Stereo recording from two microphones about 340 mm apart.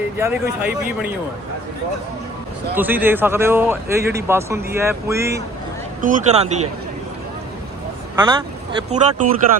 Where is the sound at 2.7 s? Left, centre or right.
Centre.